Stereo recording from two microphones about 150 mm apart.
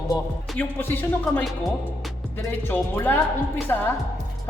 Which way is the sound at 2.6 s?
15° left (ahead or behind).